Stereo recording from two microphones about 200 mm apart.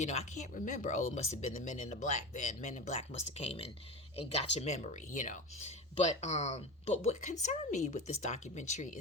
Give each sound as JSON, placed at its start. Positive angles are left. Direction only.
{"t": 0.0, "sound": "speech", "side_deg": 35}